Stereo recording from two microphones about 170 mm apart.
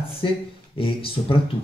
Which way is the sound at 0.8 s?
30° left (ahead or behind).